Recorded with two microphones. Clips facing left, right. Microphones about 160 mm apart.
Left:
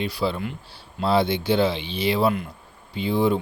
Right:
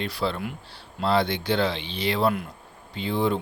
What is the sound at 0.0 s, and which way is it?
Speech, 5° left (ahead or behind).